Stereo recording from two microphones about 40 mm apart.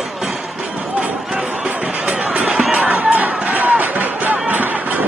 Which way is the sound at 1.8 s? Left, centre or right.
Right.